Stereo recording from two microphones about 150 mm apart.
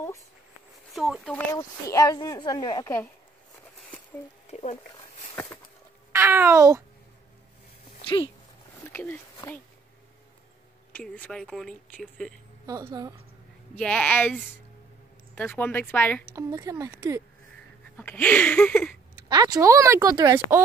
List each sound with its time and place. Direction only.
0.9 s speech: centre (ahead or behind)
1.5 s speech: 20° left (ahead or behind)
4.5 s speech: 50° left (ahead or behind)
5.3 s a sound: 15° left (ahead or behind)
6.1 s a sound: 15° right (ahead or behind)
8.0 s a sound: 35° left (ahead or behind)
8.9 s speech: 15° left (ahead or behind)
10.9 s speech: 10° left (ahead or behind)
12.6 s a woman's voice: 25° right (ahead or behind)
13.7 s speech: 10° left (ahead or behind)
16.3 s a woman's voice: 20° right (ahead or behind)
17.9 s speech: 10° left (ahead or behind)
19.1 s a woman's voice: 25° right (ahead or behind)